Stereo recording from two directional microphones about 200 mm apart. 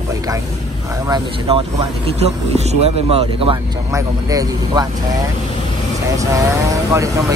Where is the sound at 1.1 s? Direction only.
25° right (ahead or behind).